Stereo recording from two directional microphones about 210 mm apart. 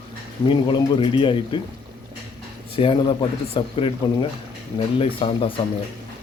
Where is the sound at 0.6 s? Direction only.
25° left (ahead or behind).